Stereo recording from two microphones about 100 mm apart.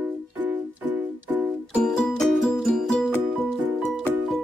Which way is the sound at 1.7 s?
5° left (ahead or behind).